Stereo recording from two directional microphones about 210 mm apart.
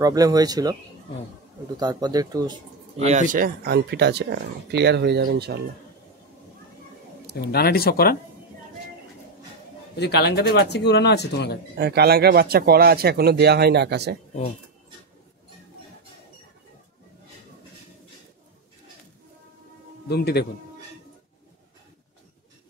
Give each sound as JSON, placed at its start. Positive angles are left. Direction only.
{"t": 0.0, "sound": "speech", "side_deg": -15}
{"t": 1.8, "sound": "speech", "side_deg": -20}
{"t": 3.0, "sound": "speech", "side_deg": -35}
{"t": 7.5, "sound": "speech", "side_deg": 45}
{"t": 9.9, "sound": "speech", "side_deg": 50}
{"t": 11.7, "sound": "speech", "side_deg": -50}
{"t": 20.1, "sound": "speech", "side_deg": 50}